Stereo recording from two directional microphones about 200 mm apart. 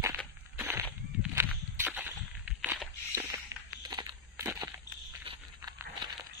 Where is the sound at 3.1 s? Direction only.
15° right (ahead or behind).